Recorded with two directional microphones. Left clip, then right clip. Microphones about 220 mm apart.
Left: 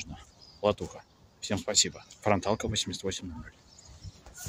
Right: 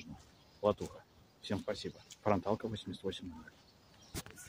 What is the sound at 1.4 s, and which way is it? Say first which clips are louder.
Speech: left 11 dB; 5° left (ahead or behind).